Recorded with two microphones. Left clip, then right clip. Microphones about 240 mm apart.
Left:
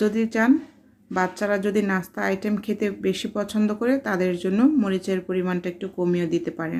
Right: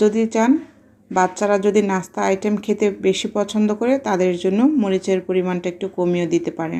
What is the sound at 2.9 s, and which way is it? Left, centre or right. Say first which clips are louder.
Speech: right 7 dB; centre.